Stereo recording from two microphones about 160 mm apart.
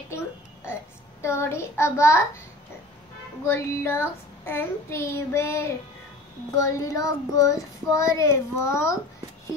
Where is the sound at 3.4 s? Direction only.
15° left (ahead or behind).